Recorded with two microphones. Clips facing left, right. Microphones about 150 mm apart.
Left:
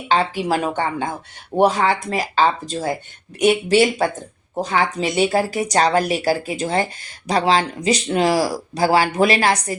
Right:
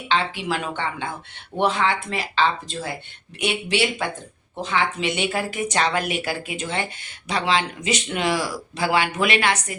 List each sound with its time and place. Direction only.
0.1 s speech: 40° left (ahead or behind)